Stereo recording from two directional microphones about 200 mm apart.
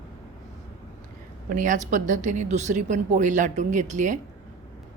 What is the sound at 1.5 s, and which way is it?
A woman's voice, 40° right (ahead or behind).